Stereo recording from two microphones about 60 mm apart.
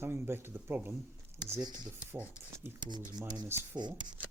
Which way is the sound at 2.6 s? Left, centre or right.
Right.